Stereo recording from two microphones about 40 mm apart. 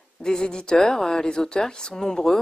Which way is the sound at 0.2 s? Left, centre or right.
Centre.